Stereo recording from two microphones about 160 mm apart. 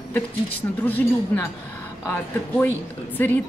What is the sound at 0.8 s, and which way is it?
Speech, 10° left (ahead or behind).